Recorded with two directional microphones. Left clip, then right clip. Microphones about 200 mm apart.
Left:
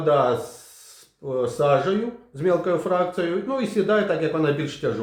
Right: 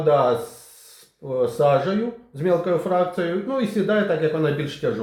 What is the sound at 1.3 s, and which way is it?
Speech, 5° right (ahead or behind).